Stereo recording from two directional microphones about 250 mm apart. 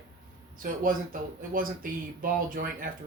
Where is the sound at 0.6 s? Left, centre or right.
Right.